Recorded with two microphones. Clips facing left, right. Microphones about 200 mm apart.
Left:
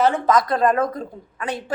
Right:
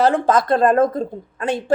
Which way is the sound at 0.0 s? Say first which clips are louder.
Right 2 dB; 30° right (ahead or behind).